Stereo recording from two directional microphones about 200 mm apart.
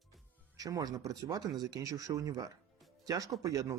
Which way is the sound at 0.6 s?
20° right (ahead or behind).